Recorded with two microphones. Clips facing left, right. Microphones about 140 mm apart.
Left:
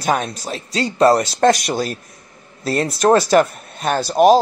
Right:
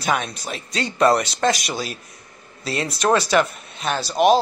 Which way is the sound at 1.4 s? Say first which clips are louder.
Left 6 dB; 55° left (ahead or behind).